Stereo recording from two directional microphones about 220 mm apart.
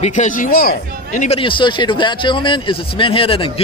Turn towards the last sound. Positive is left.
turn(degrees=25)  # may be behind; listen again after turning